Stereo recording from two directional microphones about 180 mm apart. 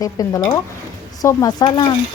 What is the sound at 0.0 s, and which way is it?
Speech, 20° left (ahead or behind).